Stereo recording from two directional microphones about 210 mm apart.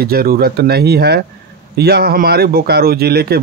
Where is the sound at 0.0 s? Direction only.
45° right (ahead or behind).